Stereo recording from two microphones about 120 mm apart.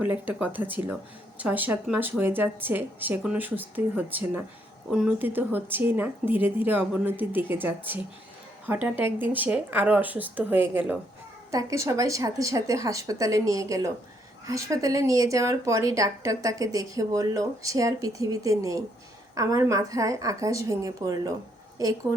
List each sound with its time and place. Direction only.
0.0 s speech: 15° right (ahead or behind)
11.5 s speech: 25° right (ahead or behind)